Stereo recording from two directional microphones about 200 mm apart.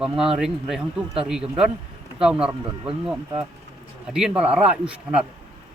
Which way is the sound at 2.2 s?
5° right (ahead or behind).